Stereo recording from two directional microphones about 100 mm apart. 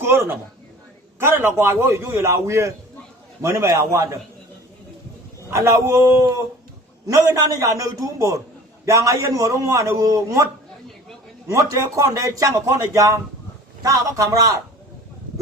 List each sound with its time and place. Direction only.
0.0 s a man's voice: 25° right (ahead or behind)
5.5 s a man's voice: 30° right (ahead or behind)